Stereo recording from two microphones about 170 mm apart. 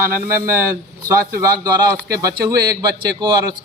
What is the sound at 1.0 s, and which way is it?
A man's voice, 20° right (ahead or behind).